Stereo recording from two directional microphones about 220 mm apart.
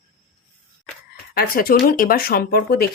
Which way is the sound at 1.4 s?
40° left (ahead or behind).